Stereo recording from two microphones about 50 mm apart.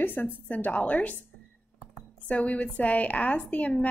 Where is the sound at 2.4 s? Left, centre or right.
Left.